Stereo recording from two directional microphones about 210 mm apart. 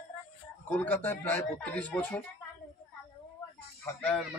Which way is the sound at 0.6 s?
10° left (ahead or behind).